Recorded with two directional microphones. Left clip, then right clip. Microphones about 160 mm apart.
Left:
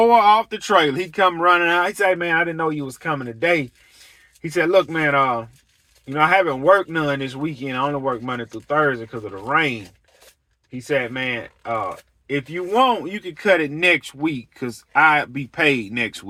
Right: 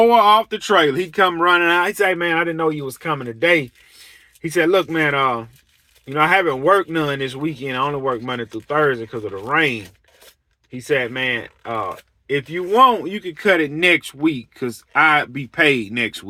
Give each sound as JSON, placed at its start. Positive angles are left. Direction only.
{"t": 0.0, "sound": "speech", "side_deg": -30}